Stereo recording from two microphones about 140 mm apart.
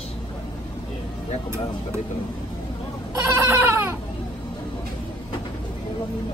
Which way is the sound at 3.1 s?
20° right (ahead or behind).